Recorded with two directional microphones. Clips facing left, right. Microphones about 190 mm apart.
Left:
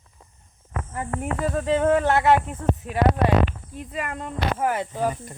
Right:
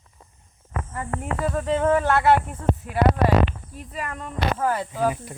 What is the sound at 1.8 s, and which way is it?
Speech, 20° left (ahead or behind).